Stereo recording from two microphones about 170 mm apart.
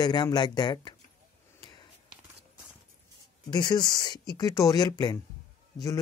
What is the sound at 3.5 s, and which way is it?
Speech, 25° left (ahead or behind).